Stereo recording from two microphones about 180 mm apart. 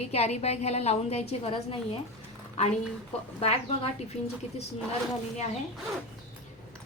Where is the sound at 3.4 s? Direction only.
35° left (ahead or behind).